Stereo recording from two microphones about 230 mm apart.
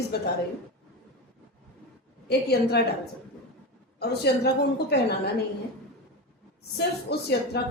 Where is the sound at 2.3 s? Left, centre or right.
Left.